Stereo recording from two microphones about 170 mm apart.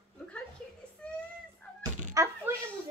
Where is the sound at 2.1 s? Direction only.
20° right (ahead or behind).